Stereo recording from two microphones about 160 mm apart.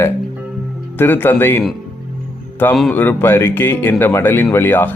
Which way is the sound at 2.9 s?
10° left (ahead or behind).